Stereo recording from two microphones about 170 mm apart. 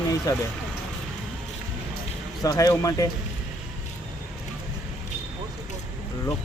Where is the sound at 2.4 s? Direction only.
20° left (ahead or behind).